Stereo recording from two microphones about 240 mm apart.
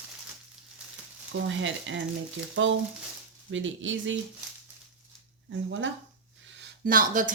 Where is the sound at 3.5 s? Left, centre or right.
Right.